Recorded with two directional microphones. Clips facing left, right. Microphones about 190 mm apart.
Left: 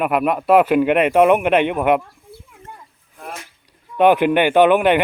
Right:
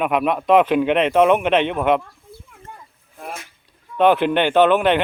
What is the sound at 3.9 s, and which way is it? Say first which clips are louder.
Speech: left 2 dB; 10° left (ahead or behind).